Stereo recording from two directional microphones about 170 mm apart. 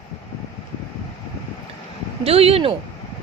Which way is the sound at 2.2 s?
35° right (ahead or behind).